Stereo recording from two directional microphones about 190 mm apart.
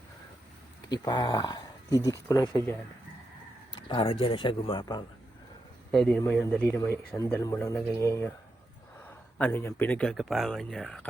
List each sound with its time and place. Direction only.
0.9 s a man's voice: 20° left (ahead or behind)
3.8 s speech: 30° left (ahead or behind)
5.9 s a man's voice: 5° left (ahead or behind)